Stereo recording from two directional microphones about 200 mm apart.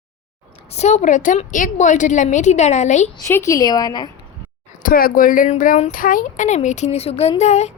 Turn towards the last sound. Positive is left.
turn(degrees=35)  # may be behind; listen again after turning